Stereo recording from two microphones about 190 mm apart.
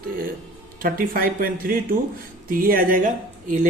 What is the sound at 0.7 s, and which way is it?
Speech, 50° right (ahead or behind).